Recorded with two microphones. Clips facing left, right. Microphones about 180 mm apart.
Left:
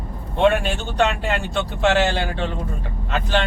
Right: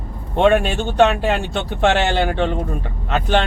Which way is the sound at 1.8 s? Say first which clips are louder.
Right 1 dB; 60° right (ahead or behind).